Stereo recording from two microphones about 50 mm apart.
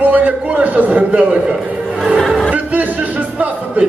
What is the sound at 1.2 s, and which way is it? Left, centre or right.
Speech, right.